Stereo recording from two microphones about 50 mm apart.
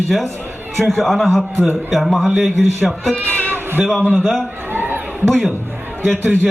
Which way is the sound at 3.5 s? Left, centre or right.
Right.